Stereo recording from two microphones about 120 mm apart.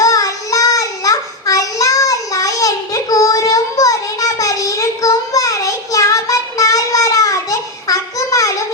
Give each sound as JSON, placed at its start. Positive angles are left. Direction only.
{"t": 0.0, "sound": "child singing", "side_deg": 30}